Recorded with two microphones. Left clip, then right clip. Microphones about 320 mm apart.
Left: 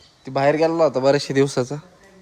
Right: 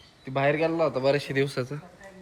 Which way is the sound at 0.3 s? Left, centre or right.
Centre.